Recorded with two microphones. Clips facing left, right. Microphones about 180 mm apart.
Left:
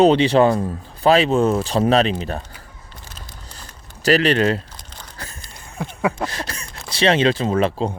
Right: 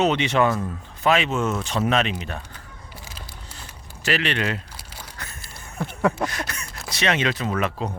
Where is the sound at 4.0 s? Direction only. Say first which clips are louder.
Left 8 dB; 40° left (ahead or behind).